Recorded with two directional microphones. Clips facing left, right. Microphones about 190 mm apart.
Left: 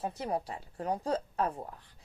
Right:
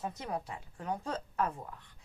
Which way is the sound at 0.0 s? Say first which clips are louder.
Left 4 dB; 30° left (ahead or behind).